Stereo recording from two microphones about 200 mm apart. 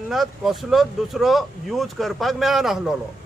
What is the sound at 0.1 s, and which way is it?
Speech, centre (ahead or behind).